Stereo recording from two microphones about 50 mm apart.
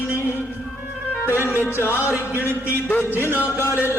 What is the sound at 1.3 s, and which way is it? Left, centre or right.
Speech, left.